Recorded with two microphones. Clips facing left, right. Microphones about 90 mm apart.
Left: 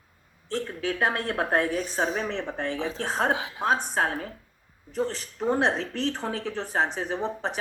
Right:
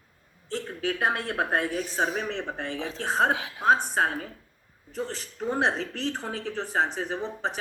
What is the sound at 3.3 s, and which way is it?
Speech, 20° left (ahead or behind).